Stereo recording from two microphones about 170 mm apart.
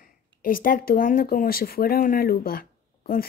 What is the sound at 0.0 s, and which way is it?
Speech, 55° left (ahead or behind).